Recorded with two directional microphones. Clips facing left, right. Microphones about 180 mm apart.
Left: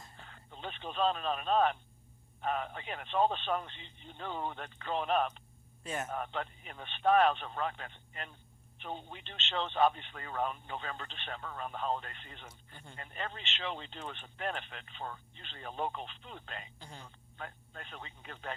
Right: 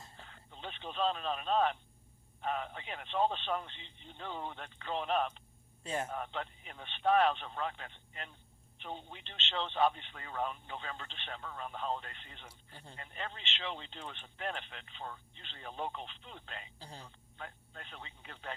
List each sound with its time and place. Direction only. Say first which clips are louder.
0.3 s radio: left 3 dB; 50° left (ahead or behind)
2.4 s speech: left 2 dB; 50° left (ahead or behind)
5.8 s a man's voice: right 1 dB; 30° right (ahead or behind)
6.1 s speech: left 2 dB; 50° left (ahead or behind)
12.7 s speech: even; 30° right (ahead or behind)
13.0 s speech: left 3 dB; 50° left (ahead or behind)
16.8 s speech: even; 35° right (ahead or behind)
17.3 s speech: left 2 dB; 50° left (ahead or behind)